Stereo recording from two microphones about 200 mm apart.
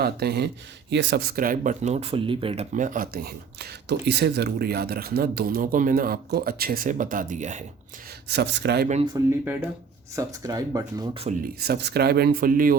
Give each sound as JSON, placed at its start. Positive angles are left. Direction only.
{"t": 0.0, "sound": "speech", "side_deg": -55}
{"t": 8.3, "sound": "speech", "side_deg": -60}
{"t": 9.2, "sound": "speech", "side_deg": -15}
{"t": 11.6, "sound": "speech", "side_deg": -55}